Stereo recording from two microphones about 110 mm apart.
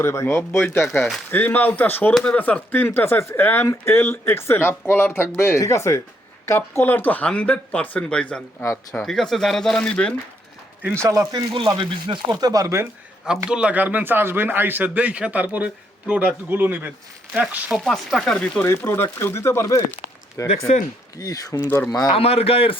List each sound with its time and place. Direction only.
0.0 s speech: 20° left (ahead or behind)
10.9 s a man's voice: 25° right (ahead or behind)
11.7 s speech: 45° right (ahead or behind); by 12.9 s 25° right (ahead or behind)
13.2 s a man's voice: 5° right (ahead or behind); by 18.6 s 10° left (ahead or behind)
18.9 s speech: 20° left (ahead or behind)
21.8 s speech: 35° left (ahead or behind)
22.1 s a man's voice: 65° left (ahead or behind)